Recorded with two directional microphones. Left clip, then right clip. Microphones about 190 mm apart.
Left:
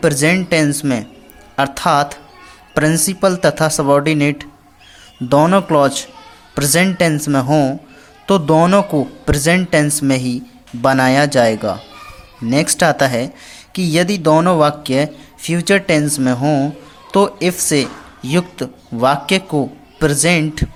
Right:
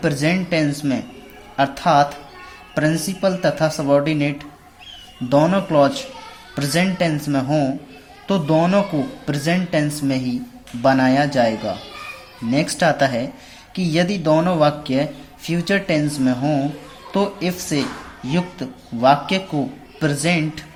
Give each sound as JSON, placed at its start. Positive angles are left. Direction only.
{"t": 0.0, "sound": "speech", "side_deg": 40}